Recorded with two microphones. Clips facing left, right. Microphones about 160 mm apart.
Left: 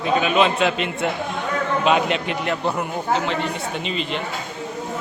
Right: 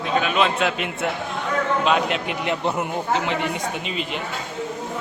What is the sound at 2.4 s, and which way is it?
Speech, 20° right (ahead or behind).